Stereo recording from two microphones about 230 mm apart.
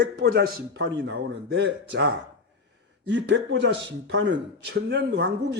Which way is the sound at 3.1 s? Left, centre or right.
Right.